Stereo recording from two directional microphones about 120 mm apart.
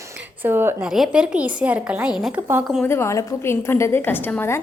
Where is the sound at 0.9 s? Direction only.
5° right (ahead or behind).